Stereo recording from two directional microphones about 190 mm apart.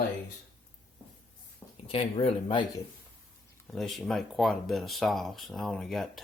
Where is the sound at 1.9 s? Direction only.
30° left (ahead or behind).